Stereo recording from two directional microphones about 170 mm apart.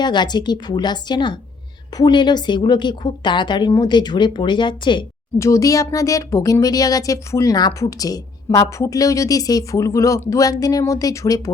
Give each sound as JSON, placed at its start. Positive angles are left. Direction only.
{"t": 0.0, "sound": "speech", "side_deg": 25}